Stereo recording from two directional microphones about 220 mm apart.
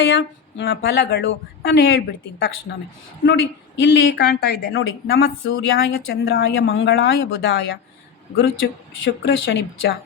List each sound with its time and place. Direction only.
0.0 s speech: 55° left (ahead or behind)
3.8 s a woman's voice: 50° left (ahead or behind)